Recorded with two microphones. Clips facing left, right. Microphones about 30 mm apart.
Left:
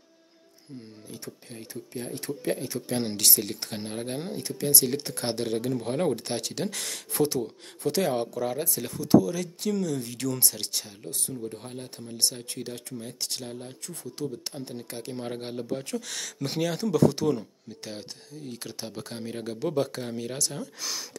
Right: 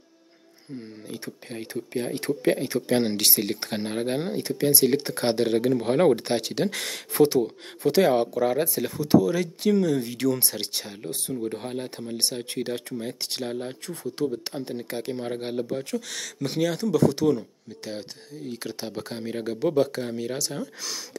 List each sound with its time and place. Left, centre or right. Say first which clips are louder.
1.1 s speech: right 6 dB; right; by 15.1 s centre
15.1 s speech: right 2 dB; centre